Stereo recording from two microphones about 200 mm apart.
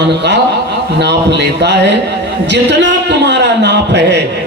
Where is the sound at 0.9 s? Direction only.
60° right (ahead or behind).